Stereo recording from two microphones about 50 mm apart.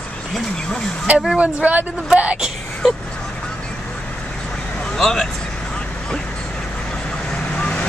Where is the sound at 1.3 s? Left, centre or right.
Right.